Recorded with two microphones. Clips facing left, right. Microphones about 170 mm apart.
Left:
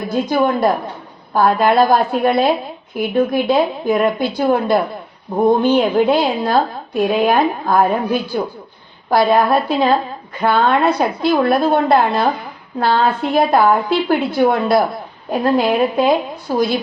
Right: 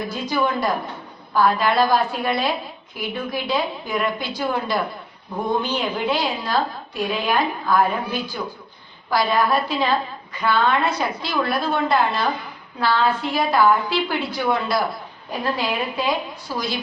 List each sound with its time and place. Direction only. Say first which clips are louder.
0.1 s a woman's voice: left 9 dB; 50° left (ahead or behind)